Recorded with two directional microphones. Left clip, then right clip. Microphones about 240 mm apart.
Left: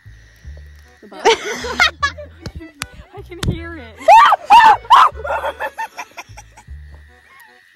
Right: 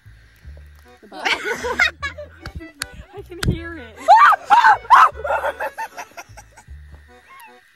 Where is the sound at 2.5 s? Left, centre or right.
Centre.